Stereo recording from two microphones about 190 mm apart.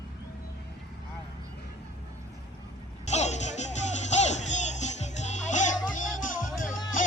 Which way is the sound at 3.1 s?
35° left (ahead or behind).